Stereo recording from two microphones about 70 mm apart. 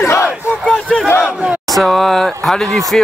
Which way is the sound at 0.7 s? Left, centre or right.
Centre.